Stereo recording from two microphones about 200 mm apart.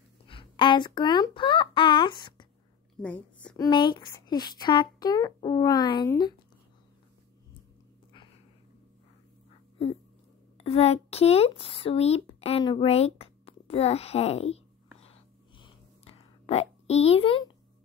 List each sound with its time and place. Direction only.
0.3 s speech: 25° left (ahead or behind)
3.0 s a woman's voice: 5° left (ahead or behind)
3.4 s speech: 20° left (ahead or behind)
10.6 s speech: 30° left (ahead or behind)
15.0 s whispering: 30° left (ahead or behind)